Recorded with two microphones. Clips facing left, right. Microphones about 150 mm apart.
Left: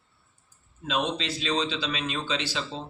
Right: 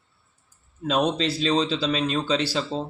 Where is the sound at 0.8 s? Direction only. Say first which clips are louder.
Right 6 dB; 40° right (ahead or behind).